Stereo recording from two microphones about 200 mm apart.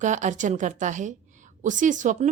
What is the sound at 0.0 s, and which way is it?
A woman's voice, 40° right (ahead or behind).